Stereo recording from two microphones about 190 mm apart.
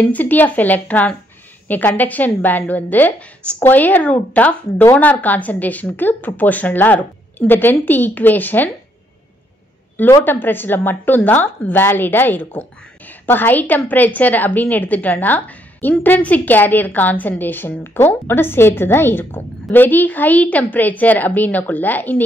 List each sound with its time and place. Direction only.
0.0 s a woman's voice: 10° left (ahead or behind)
10.2 s a woman's voice: 10° left (ahead or behind)